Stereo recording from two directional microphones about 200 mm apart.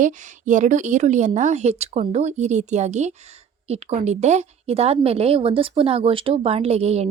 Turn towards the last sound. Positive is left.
turn(degrees=-30)  # may be behind; listen again after turning